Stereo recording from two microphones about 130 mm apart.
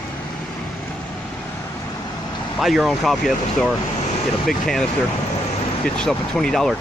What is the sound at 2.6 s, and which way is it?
Speech, centre (ahead or behind).